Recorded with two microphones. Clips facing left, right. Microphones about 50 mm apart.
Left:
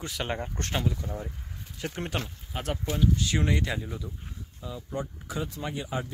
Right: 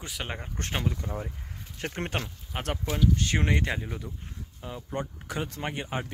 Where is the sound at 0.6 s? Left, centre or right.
Right.